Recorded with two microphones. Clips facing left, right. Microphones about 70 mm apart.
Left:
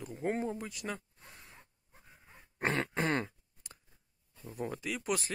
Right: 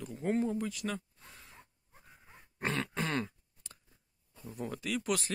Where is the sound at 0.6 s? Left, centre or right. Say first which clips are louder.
Right 4 dB; centre.